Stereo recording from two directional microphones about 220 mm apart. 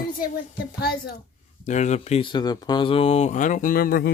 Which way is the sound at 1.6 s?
30° left (ahead or behind).